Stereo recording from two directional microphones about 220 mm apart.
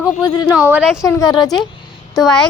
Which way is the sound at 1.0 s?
15° left (ahead or behind).